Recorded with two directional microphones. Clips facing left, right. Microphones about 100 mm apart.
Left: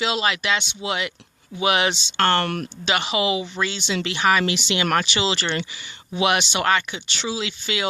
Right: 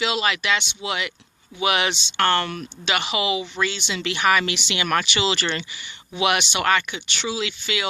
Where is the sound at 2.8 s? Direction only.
35° left (ahead or behind).